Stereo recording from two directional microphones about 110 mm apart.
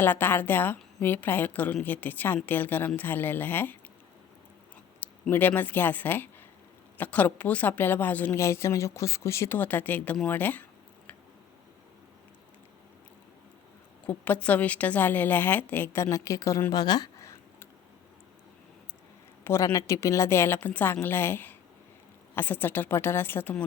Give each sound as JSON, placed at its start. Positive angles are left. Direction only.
{"t": 0.0, "sound": "a woman's voice", "side_deg": 20}
{"t": 5.3, "sound": "a woman's voice", "side_deg": 15}
{"t": 10.2, "sound": "a sound", "side_deg": 15}
{"t": 14.0, "sound": "a woman's voice", "side_deg": 10}
{"t": 19.5, "sound": "a woman's voice", "side_deg": 25}